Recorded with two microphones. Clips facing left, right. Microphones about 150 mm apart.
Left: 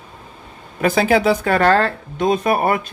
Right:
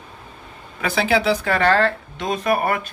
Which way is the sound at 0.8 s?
45° left (ahead or behind).